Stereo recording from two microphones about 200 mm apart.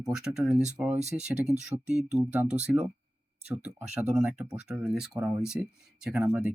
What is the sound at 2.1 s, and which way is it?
Speech, 5° right (ahead or behind).